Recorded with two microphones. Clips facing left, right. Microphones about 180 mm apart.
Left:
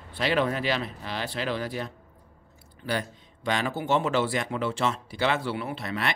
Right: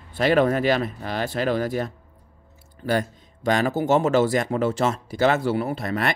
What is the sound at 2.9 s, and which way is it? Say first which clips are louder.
Speech: right 7 dB; 45° right (ahead or behind).